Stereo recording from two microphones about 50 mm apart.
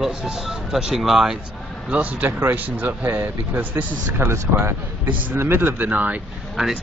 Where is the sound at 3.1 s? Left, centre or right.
Right.